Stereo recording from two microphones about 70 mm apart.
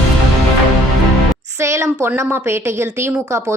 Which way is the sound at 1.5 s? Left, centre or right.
Right.